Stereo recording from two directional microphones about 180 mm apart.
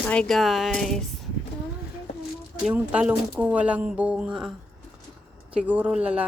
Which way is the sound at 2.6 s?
5° right (ahead or behind).